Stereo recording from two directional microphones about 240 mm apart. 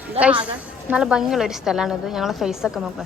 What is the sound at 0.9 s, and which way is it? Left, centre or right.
A woman's voice, centre.